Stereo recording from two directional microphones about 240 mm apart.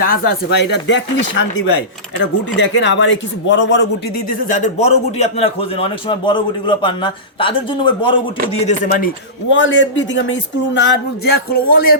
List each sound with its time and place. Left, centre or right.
0.3 s dishes: left
4.3 s speech: left
8.6 s speech: left
9.5 s dishes: left